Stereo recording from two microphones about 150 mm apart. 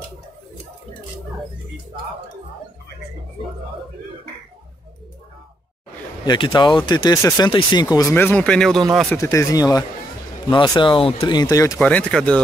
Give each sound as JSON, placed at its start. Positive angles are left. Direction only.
{"t": 6.2, "sound": "speech", "side_deg": 30}
{"t": 9.2, "sound": "speech", "side_deg": 20}
{"t": 11.8, "sound": "speech", "side_deg": 10}